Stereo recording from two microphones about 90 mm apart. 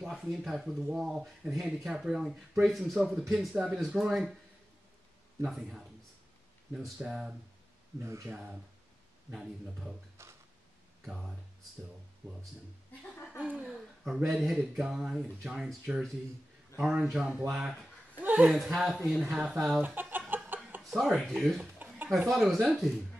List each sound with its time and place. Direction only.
0.0 s speech: 5° right (ahead or behind)
5.4 s speech: 5° right (ahead or behind)
7.0 s speech: 5° right (ahead or behind)
8.0 s speech: 30° right (ahead or behind)
9.3 s speech: 5° right (ahead or behind)
10.2 s a sound: 30° right (ahead or behind)
11.1 s speech: 5° right (ahead or behind)
13.4 s speech: 15° right (ahead or behind)
18.2 s a man's voice: 20° right (ahead or behind)
18.5 s speech: centre (ahead or behind)
20.0 s a sound: 20° right (ahead or behind)
20.9 s speech: centre (ahead or behind)
21.7 s a sound: 20° right (ahead or behind)
22.3 s speech: centre (ahead or behind)